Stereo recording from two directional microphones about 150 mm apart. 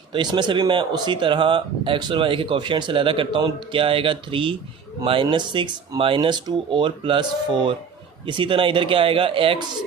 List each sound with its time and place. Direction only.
0.1 s speech: 30° right (ahead or behind)